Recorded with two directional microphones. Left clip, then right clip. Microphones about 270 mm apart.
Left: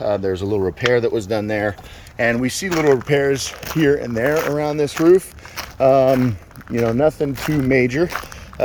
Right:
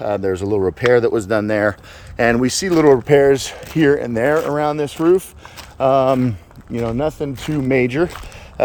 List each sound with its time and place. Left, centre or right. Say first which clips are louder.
0.0 s speech: even; centre
4.0 s speech: right 2 dB; right
4.3 s speech: right 2 dB; centre